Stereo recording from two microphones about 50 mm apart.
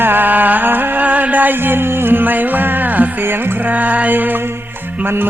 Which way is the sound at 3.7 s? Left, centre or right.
Right.